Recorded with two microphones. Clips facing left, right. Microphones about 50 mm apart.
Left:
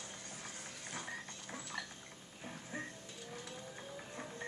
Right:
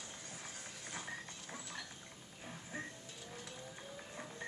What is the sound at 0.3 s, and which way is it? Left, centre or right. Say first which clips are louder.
Music: left 1 dB; centre.